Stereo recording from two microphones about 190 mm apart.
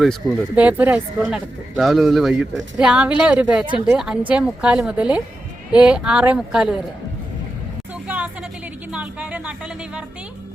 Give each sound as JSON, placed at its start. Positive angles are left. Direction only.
{"t": 0.0, "sound": "speech", "side_deg": 0}
{"t": 8.0, "sound": "a sound", "side_deg": -5}
{"t": 8.9, "sound": "speech", "side_deg": -5}